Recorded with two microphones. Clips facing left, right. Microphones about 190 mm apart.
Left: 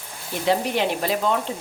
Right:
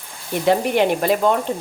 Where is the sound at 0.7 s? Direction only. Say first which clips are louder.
Right 6 dB; 55° right (ahead or behind).